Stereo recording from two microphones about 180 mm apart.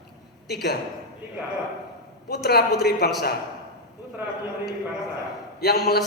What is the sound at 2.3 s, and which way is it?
Speech, 60° left (ahead or behind).